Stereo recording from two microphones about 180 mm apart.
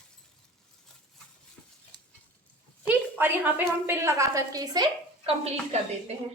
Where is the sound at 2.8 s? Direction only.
10° right (ahead or behind).